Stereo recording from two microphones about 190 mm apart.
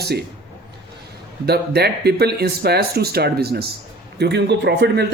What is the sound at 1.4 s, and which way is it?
Speech, 60° right (ahead or behind).